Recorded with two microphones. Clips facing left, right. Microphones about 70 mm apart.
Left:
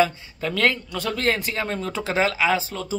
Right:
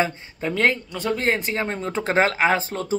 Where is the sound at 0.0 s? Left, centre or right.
Right.